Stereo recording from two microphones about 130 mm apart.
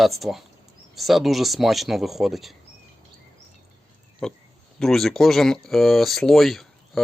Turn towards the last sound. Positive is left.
turn(degrees=0)  # may be behind; listen again after turning